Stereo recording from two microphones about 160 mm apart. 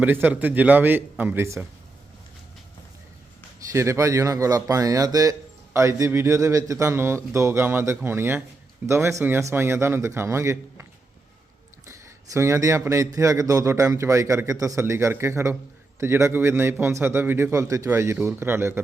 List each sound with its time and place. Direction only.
0.0 s a man's voice: 10° right (ahead or behind)
3.7 s a man's voice: 20° right (ahead or behind)
11.9 s a man's voice: 20° right (ahead or behind)